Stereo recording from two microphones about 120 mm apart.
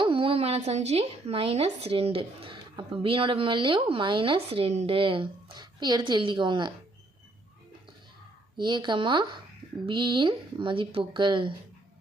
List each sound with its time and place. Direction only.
0.0 s a woman's voice: 50° right (ahead or behind)
8.5 s a woman's voice: 40° right (ahead or behind)